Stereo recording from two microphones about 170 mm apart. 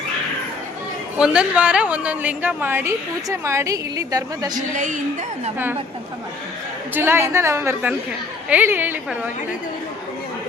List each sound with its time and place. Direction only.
1.2 s a woman's voice: 5° right (ahead or behind); by 4.6 s 20° right (ahead or behind)
4.7 s a woman's voice: 45° right (ahead or behind)
6.9 s a woman's voice: 15° right (ahead or behind)